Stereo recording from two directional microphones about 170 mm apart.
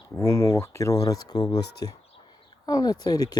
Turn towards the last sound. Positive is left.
turn(degrees=20)  # may be behind; listen again after turning